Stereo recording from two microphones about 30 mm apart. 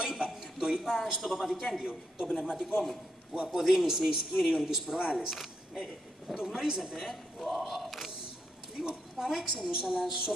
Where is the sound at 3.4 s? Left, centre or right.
Centre.